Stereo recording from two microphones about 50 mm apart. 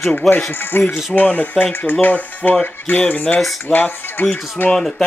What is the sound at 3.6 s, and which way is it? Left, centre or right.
Speech, left.